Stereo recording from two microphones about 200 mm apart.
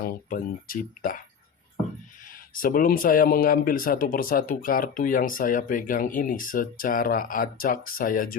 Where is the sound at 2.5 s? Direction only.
45° left (ahead or behind).